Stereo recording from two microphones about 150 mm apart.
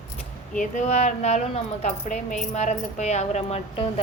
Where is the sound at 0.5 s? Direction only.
55° left (ahead or behind).